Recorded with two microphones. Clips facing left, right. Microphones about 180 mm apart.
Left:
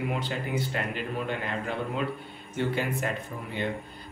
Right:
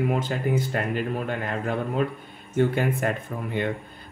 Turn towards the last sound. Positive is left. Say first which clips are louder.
# right 6 dB
turn(degrees=-50)  # may be behind; listen again after turning